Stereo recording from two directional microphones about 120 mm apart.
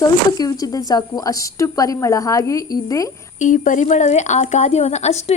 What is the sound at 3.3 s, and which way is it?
A woman's voice, 90° left.